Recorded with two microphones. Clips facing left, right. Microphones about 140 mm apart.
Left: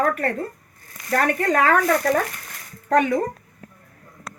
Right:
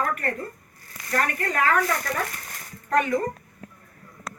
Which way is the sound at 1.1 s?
85° left.